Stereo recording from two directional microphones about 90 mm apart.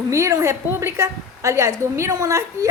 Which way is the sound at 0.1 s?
35° right (ahead or behind).